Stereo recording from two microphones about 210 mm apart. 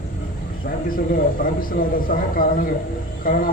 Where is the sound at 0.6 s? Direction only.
40° left (ahead or behind).